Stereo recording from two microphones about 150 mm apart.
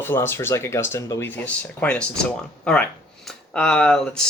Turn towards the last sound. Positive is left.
turn(degrees=5)  # may be behind; listen again after turning